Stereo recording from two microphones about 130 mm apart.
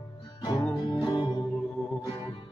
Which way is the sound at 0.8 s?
40° left (ahead or behind).